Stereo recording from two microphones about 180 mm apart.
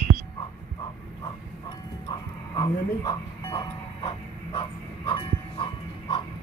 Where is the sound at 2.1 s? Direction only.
25° left (ahead or behind).